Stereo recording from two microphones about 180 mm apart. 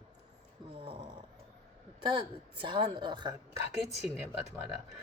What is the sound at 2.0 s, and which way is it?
Speech, 25° right (ahead or behind).